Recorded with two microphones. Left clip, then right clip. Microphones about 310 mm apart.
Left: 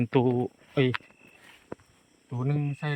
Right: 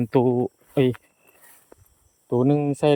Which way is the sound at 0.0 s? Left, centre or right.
Centre.